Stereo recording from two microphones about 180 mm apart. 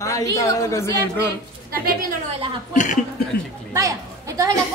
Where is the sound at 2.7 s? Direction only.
45° left (ahead or behind).